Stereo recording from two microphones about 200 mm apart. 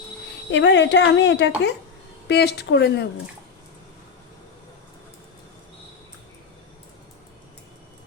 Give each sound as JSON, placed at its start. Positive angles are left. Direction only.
{"t": 0.5, "sound": "a woman's voice", "side_deg": 60}